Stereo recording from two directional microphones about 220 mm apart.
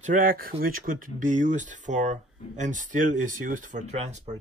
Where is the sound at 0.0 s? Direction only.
40° right (ahead or behind).